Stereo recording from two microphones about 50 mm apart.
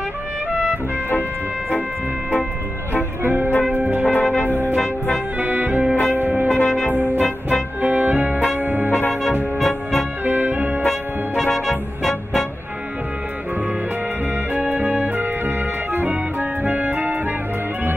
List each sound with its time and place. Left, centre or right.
3.3 s music: right
4.0 s brass instrument: left
5.4 s music: right
6.0 s church bell: right
7.8 s music: right
10.2 s music: right
11.5 s music: centre
14.5 s organ: right
15.1 s organ: right